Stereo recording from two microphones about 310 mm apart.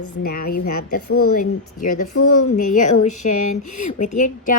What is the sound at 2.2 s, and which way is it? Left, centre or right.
Speech, left.